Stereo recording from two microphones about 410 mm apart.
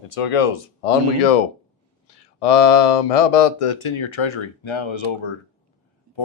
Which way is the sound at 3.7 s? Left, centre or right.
Left.